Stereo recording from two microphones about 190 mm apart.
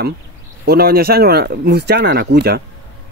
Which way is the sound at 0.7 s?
55° right (ahead or behind).